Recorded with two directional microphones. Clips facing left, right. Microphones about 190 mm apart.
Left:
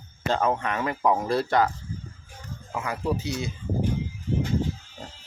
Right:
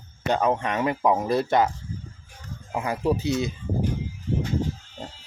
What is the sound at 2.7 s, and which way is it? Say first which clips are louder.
Speech: right 3 dB; 30° right (ahead or behind).